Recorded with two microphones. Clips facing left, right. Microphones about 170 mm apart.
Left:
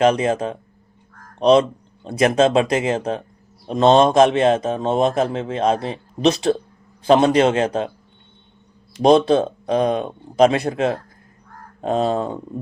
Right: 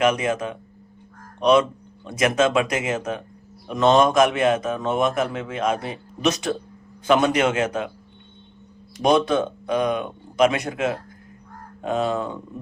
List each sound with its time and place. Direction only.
0.0 s speech: 30° left (ahead or behind)
9.0 s speech: 30° left (ahead or behind)